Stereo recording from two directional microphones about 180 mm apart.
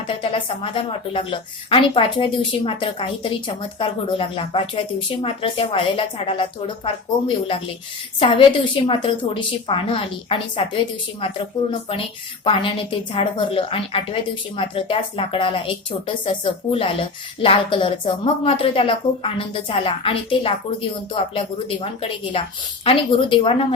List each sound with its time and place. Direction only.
0.2 s a woman's voice: 30° left (ahead or behind)
11.7 s a woman's voice: 30° left (ahead or behind)